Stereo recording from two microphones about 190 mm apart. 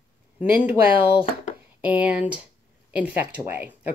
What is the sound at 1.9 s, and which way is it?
Speech, 10° right (ahead or behind).